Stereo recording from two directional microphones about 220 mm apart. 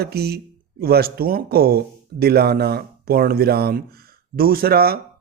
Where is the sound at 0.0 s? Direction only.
45° right (ahead or behind).